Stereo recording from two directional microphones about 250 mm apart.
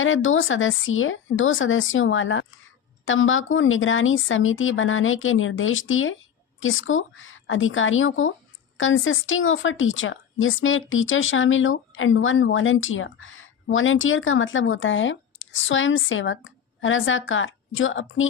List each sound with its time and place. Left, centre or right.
0.0 s a woman's voice: left